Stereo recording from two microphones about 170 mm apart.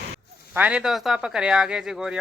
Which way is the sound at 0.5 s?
5° right (ahead or behind).